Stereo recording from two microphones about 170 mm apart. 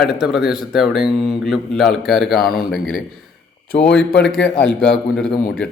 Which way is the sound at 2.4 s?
60° left (ahead or behind).